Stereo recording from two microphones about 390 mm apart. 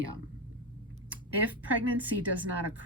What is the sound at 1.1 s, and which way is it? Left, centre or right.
Speech, right.